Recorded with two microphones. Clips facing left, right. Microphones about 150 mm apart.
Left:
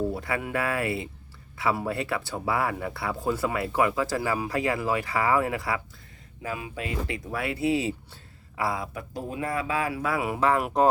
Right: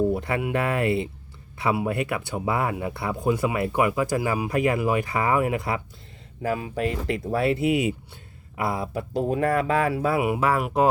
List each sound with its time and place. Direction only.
0.1 s speech: 20° right (ahead or behind)
6.4 s speech: 40° right (ahead or behind)
9.1 s speech: 65° right (ahead or behind)
9.8 s speech: 30° right (ahead or behind)
10.2 s speech: 10° right (ahead or behind)